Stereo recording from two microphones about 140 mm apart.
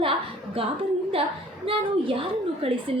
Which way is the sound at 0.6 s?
40° right (ahead or behind).